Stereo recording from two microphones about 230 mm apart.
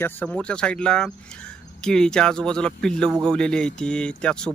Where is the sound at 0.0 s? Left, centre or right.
Centre.